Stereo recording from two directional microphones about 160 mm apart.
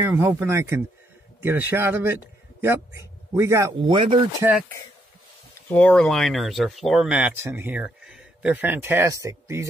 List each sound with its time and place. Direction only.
0.0 s a man's voice: 10° right (ahead or behind)
3.8 s speech: 35° right (ahead or behind)
5.7 s speech: 10° left (ahead or behind); by 9.7 s 20° right (ahead or behind)